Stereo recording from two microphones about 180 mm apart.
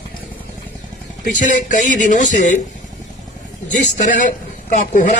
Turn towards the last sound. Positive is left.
turn(degrees=45)  # may be behind; listen again after turning